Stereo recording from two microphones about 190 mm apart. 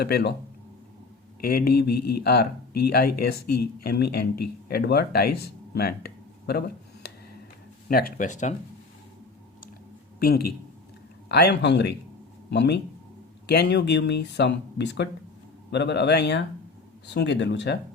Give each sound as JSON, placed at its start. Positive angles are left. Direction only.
{"t": 0.0, "sound": "speech", "side_deg": 55}
{"t": 1.4, "sound": "speech", "side_deg": 50}
{"t": 10.2, "sound": "speech", "side_deg": 55}